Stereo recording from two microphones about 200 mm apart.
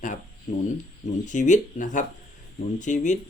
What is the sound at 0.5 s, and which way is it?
Speech, 35° left (ahead or behind).